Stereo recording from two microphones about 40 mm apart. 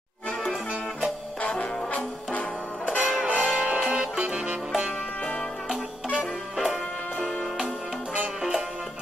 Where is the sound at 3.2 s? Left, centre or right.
Right.